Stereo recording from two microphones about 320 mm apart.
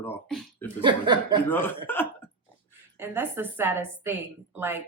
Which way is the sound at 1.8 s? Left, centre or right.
Centre.